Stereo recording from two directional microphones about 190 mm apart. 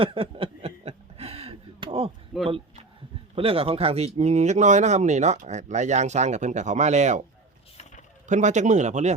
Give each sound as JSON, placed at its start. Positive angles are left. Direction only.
{"t": 0.0, "sound": "a sound", "side_deg": -30}
{"t": 3.3, "sound": "speech", "side_deg": -30}
{"t": 8.3, "sound": "speech", "side_deg": -40}